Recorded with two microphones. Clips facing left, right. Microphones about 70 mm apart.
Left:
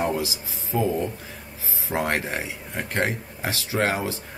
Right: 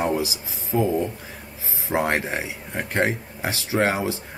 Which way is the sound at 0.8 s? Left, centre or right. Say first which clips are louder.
Right 2 dB; centre.